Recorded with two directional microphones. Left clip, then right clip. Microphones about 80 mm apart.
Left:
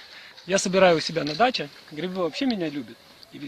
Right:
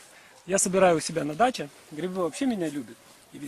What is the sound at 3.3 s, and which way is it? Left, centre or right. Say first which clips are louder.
Speech: left 2 dB; right.